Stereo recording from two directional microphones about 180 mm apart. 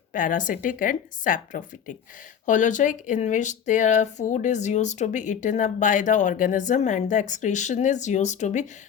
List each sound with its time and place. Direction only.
0.1 s speech: 45° left (ahead or behind)